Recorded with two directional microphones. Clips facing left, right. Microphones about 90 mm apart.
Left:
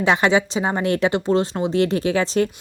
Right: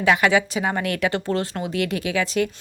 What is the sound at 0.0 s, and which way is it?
A woman's voice, 25° left (ahead or behind).